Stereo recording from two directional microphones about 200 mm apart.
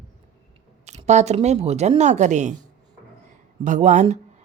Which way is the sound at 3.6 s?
40° right (ahead or behind).